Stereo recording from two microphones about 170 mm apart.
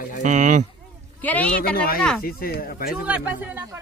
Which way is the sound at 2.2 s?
60° left (ahead or behind).